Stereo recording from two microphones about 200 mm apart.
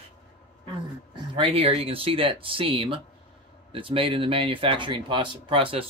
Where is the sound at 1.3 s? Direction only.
30° right (ahead or behind).